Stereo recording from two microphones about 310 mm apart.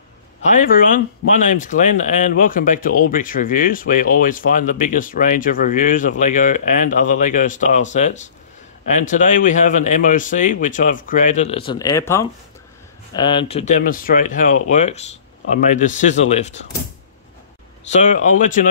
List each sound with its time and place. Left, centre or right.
0.4 s speech: left
17.8 s speech: left